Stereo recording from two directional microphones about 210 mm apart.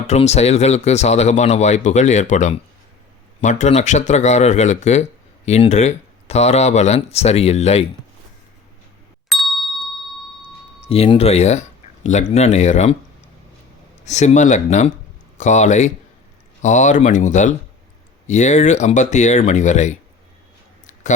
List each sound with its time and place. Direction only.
0.1 s speech: 30° left (ahead or behind)
9.3 s ding: centre (ahead or behind)
10.8 s speech: 30° left (ahead or behind)
14.0 s speech: 35° left (ahead or behind)
20.8 s a sound: 35° left (ahead or behind)